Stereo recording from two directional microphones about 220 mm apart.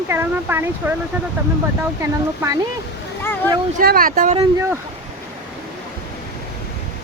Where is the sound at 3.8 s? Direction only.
40° right (ahead or behind).